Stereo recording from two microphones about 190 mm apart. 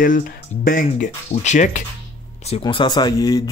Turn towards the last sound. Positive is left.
turn(degrees=20)  # may be behind; listen again after turning